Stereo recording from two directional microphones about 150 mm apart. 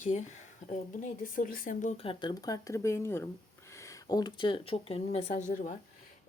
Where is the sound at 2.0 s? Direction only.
35° left (ahead or behind).